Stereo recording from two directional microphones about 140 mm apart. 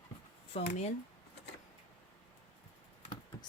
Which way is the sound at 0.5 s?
60° left (ahead or behind).